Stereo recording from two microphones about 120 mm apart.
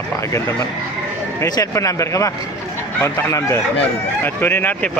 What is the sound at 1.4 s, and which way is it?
Speech, 25° left (ahead or behind).